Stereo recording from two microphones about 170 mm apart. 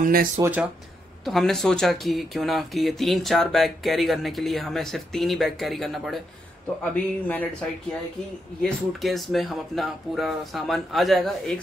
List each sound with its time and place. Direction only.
0.0 s speech: 55° right (ahead or behind)
0.4 s speech: 10° right (ahead or behind)
1.2 s speech: centre (ahead or behind)
8.6 s speech: centre (ahead or behind)